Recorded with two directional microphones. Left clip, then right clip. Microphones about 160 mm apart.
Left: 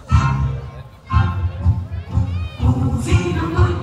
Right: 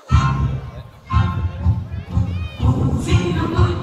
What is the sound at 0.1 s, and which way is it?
Music, 5° left (ahead or behind).